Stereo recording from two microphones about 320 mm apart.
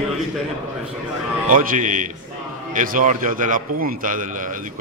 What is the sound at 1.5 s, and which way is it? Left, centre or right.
A man's voice, right.